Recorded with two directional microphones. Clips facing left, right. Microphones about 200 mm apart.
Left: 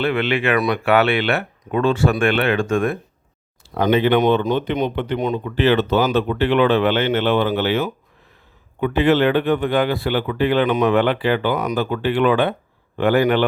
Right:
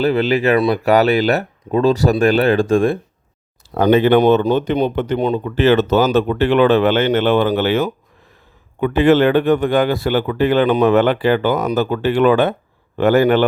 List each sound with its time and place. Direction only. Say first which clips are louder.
0.0 s speech: right 4 dB; 40° right (ahead or behind)
3.8 s speech: right 4 dB; 45° right (ahead or behind)